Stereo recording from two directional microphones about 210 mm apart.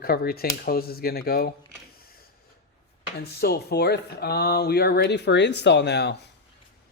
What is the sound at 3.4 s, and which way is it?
A man's voice, 50° left (ahead or behind).